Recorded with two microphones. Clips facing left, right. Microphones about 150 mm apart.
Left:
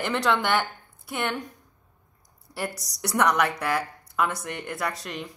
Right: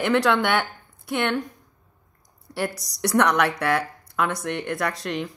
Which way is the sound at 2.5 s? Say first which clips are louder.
Right 5 dB; 70° right (ahead or behind).